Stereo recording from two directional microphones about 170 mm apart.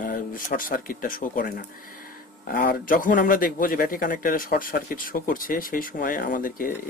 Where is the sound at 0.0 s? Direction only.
55° left (ahead or behind).